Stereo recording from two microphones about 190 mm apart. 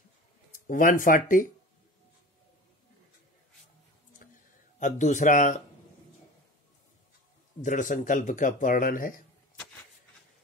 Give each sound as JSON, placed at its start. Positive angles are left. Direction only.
{"t": 0.7, "sound": "speech", "side_deg": 45}
{"t": 4.7, "sound": "speech", "side_deg": 40}
{"t": 7.6, "sound": "speech", "side_deg": 40}